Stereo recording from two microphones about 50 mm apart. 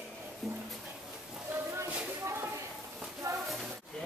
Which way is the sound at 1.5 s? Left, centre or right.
Right.